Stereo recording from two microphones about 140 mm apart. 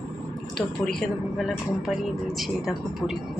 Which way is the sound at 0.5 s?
5° left (ahead or behind).